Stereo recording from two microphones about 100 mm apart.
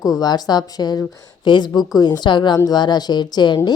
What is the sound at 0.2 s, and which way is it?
A woman's voice, 45° left (ahead or behind).